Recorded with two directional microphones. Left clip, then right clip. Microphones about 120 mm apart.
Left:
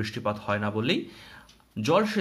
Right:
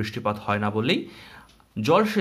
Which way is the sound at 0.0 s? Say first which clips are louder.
Right 3 dB; 20° right (ahead or behind).